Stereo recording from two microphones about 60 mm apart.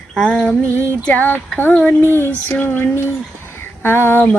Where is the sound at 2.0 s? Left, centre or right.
Left.